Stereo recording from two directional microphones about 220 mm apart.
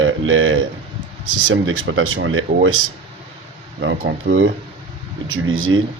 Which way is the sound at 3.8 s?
50° right (ahead or behind).